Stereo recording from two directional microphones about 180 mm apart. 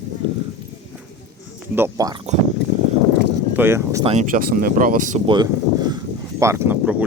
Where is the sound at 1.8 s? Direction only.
20° right (ahead or behind).